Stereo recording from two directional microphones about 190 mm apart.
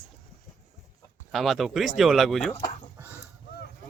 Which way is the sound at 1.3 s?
Centre (ahead or behind).